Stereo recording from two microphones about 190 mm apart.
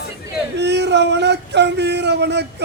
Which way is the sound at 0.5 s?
65° right (ahead or behind).